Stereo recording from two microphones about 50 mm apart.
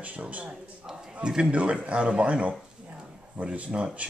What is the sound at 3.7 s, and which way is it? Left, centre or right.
Speech, centre.